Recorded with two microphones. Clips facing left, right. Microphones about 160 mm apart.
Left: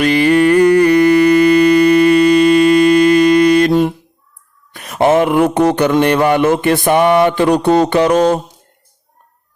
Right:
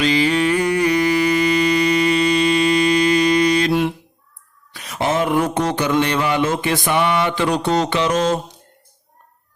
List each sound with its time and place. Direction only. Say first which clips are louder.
0.0 s music: left 6 dB; 55° left (ahead or behind)
4.7 s a man's voice: left 9 dB; 55° left (ahead or behind)